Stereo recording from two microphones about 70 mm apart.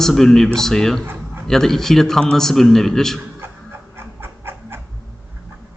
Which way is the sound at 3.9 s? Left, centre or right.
Right.